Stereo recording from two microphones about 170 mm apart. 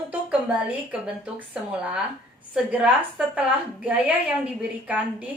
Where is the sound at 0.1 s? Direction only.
5° right (ahead or behind).